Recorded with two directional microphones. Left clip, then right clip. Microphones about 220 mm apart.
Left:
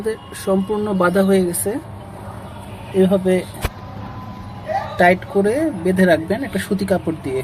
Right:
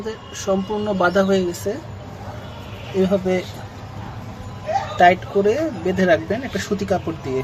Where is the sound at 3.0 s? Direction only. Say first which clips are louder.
Left 3 dB; 15° left (ahead or behind).